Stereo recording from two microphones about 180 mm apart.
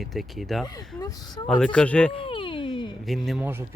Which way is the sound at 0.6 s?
20° left (ahead or behind).